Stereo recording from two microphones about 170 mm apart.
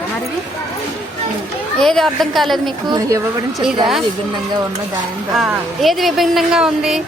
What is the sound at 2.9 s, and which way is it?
Speech, 20° right (ahead or behind).